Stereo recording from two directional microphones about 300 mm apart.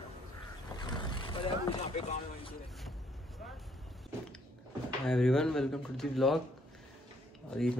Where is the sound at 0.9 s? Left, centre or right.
Centre.